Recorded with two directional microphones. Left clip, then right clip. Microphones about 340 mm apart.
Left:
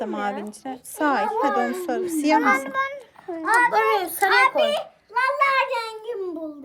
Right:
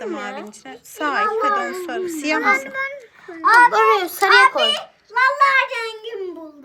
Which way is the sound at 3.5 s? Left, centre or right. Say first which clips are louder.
Right 6 dB; centre.